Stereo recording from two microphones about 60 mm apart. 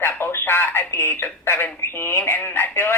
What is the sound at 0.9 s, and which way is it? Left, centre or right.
Speech, left.